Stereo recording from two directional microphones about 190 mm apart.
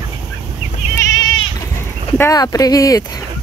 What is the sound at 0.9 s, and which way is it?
Goat, 20° left (ahead or behind).